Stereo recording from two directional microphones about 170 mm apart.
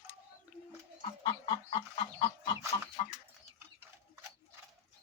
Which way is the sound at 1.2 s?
30° left (ahead or behind).